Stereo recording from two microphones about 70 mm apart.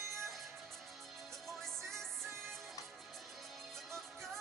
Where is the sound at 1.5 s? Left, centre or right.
Centre.